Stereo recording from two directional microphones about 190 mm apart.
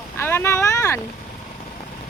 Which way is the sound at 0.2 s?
10° left (ahead or behind).